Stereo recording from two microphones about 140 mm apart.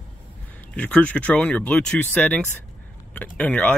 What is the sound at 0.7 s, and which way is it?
Speech, 10° left (ahead or behind).